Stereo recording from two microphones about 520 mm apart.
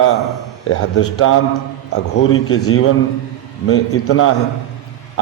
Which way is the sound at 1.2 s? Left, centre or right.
Left.